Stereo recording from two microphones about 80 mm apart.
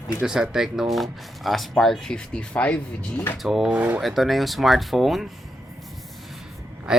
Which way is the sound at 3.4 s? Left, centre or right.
Centre.